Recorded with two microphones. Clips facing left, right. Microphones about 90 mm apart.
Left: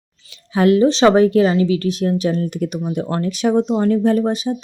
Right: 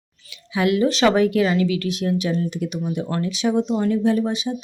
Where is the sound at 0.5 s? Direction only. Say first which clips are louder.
Left 6 dB; 40° left (ahead or behind).